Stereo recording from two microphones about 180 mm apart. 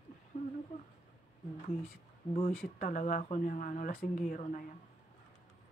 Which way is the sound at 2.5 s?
55° left (ahead or behind).